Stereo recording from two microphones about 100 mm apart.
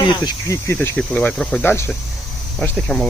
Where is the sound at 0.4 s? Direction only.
30° left (ahead or behind).